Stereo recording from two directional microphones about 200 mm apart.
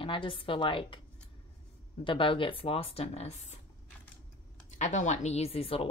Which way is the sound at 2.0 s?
25° left (ahead or behind).